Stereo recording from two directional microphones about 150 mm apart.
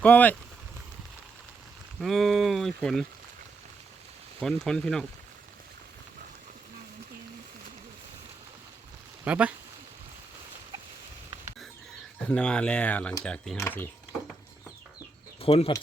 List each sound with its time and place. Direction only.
0.0 s speech: 10° left (ahead or behind)
2.0 s speech: centre (ahead or behind)
4.4 s speech: 5° left (ahead or behind)
9.2 s speech: 10° right (ahead or behind)
12.3 s speech: 5° left (ahead or behind)
15.4 s speech: 35° left (ahead or behind)